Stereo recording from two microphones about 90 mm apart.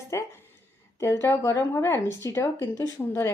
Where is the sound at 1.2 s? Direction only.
30° left (ahead or behind).